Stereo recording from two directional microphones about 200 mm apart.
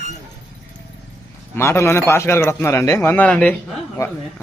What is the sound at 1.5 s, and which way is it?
A man's voice, 15° left (ahead or behind).